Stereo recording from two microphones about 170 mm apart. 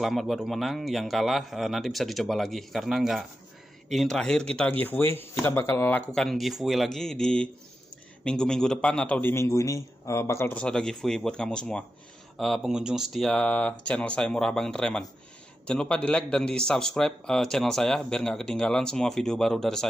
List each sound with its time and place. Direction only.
0.0 s a man's voice: centre (ahead or behind)